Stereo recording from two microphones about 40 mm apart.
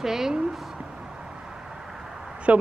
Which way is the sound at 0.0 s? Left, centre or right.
Centre.